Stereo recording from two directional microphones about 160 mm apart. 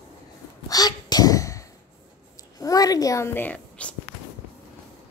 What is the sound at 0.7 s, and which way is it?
Sneeze, 25° left (ahead or behind).